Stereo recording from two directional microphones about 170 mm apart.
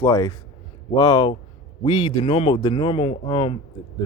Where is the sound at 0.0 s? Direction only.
20° left (ahead or behind).